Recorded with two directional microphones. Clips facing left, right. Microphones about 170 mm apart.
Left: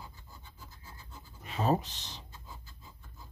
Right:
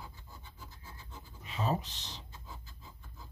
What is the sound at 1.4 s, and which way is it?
Writing, 50° left (ahead or behind).